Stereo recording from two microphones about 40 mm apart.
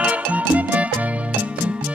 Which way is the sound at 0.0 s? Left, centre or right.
Right.